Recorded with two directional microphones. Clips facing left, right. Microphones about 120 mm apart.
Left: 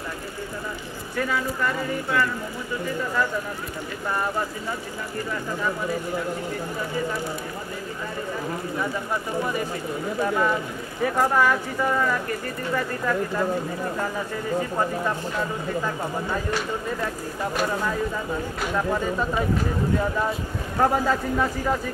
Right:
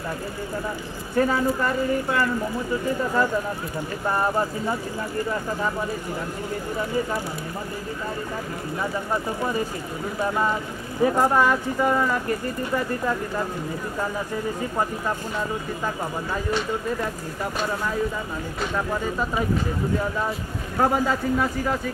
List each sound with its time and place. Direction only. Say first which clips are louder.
1.1 s speech: right 5 dB; 35° right (ahead or behind)
4.1 s speech: right 3 dB; 30° right (ahead or behind)
11.0 s speech: right 2 dB; 20° right (ahead or behind)
20.8 s speech: even; 5° right (ahead or behind)